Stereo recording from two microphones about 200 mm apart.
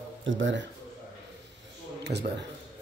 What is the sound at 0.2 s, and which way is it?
Speech, 70° right (ahead or behind).